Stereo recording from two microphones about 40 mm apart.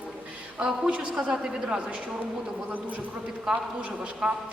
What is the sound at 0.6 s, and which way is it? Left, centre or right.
Speech, right.